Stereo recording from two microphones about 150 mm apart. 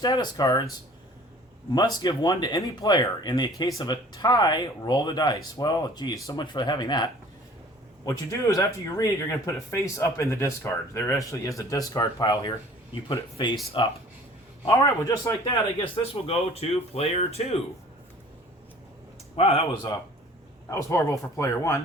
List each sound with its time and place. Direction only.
0.0 s speech: 30° left (ahead or behind)
1.7 s speech: 30° left (ahead or behind)
14.7 s speech: 20° left (ahead or behind)
15.8 s speech: 40° left (ahead or behind)
19.4 s speech: 40° left (ahead or behind)
20.7 s speech: 20° left (ahead or behind)